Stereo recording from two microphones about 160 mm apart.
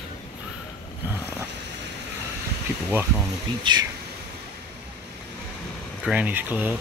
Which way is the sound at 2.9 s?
10° right (ahead or behind).